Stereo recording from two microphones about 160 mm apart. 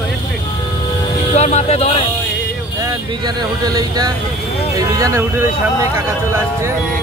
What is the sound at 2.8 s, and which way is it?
Speech, 25° right (ahead or behind).